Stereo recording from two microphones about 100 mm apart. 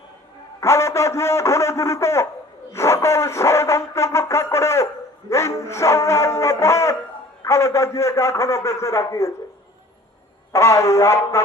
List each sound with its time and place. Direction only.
0.6 s a sound: 30° left (ahead or behind)
2.7 s brass instrument: 30° left (ahead or behind)
5.3 s music: 30° left (ahead or behind)
7.4 s a man's voice: 30° left (ahead or behind)
10.5 s a man's voice: 30° left (ahead or behind)